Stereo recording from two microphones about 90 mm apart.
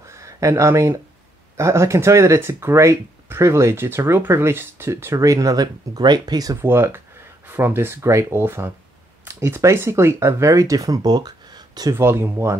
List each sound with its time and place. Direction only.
0.1 s speech: 35° right (ahead or behind)
6.6 s speech: 25° right (ahead or behind); by 11.9 s 50° right (ahead or behind)
11.9 s speech: 30° right (ahead or behind)